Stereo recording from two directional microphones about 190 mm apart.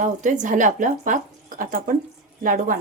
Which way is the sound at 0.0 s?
40° right (ahead or behind).